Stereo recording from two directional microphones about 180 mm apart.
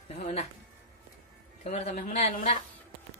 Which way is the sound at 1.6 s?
35° left (ahead or behind).